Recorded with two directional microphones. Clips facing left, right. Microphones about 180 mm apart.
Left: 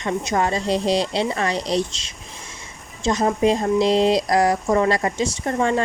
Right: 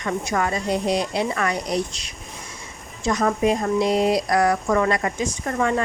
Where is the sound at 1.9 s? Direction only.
90° left.